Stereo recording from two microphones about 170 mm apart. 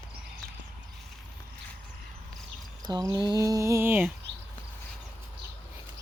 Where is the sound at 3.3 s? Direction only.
20° right (ahead or behind).